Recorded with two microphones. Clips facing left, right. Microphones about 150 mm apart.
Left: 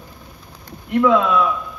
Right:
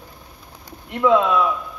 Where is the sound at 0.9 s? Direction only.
20° right (ahead or behind).